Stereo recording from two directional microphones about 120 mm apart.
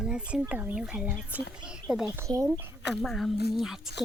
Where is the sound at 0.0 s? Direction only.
5° right (ahead or behind).